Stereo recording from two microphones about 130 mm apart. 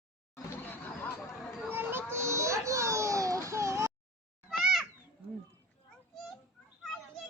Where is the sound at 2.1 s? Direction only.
20° right (ahead or behind).